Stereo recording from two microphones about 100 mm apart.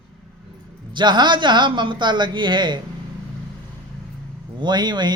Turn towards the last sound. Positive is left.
turn(degrees=-45)  # may be behind; listen again after turning